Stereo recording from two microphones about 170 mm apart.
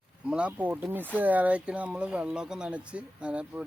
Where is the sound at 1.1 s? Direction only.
10° right (ahead or behind).